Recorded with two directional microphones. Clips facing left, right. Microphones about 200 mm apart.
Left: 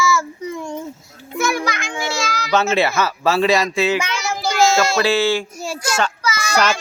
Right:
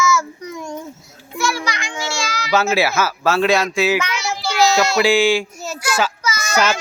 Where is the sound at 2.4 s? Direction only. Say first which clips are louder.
Even; 5° right (ahead or behind).